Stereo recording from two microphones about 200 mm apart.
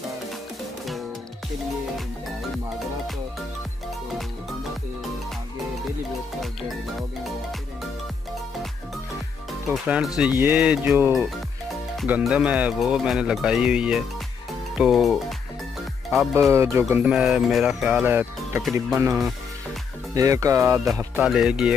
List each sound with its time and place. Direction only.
9.7 s speech: 5° right (ahead or behind)
16.3 s speech: 15° right (ahead or behind)
20.2 s speech: 15° right (ahead or behind)
21.2 s speech: 5° right (ahead or behind)